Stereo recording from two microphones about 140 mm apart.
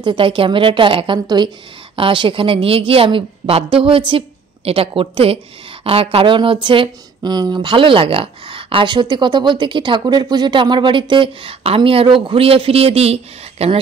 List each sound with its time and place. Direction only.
0.0 s a woman's voice: 35° right (ahead or behind)